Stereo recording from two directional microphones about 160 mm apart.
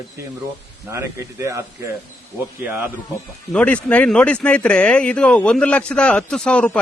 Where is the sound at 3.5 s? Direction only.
10° left (ahead or behind).